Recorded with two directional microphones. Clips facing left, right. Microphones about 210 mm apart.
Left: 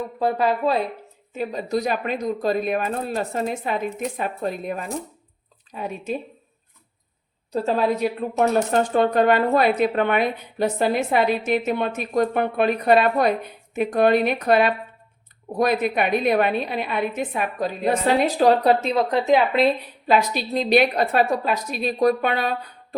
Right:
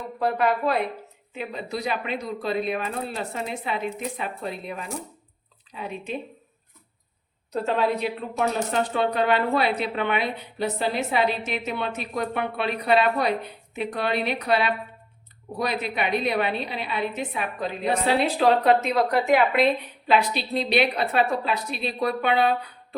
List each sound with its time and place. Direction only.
0.2 s speech: 30° left (ahead or behind)
1.3 s speech: 40° left (ahead or behind)
7.5 s speech: 35° left (ahead or behind)
20.1 s speech: 45° left (ahead or behind)